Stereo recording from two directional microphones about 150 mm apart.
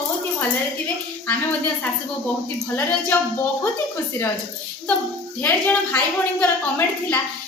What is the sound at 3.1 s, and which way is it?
Speech, 15° left (ahead or behind).